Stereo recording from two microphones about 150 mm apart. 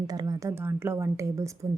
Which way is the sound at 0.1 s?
25° right (ahead or behind).